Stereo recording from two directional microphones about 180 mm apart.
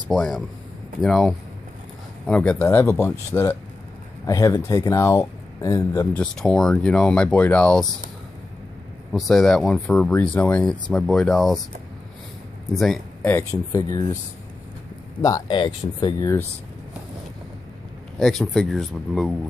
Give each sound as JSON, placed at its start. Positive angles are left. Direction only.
{"t": 0.1, "sound": "speech", "side_deg": 0}
{"t": 6.1, "sound": "speech", "side_deg": 5}
{"t": 9.1, "sound": "speech", "side_deg": 0}
{"t": 12.7, "sound": "speech", "side_deg": 0}
{"t": 13.3, "sound": "speech", "side_deg": 15}
{"t": 15.2, "sound": "speech", "side_deg": 20}
{"t": 18.2, "sound": "speech", "side_deg": 0}